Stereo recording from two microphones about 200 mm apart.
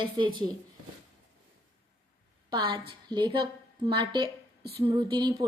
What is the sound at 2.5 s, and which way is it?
A woman's voice, 25° right (ahead or behind).